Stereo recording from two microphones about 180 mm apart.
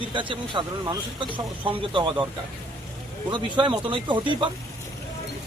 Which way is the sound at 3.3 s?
25° right (ahead or behind).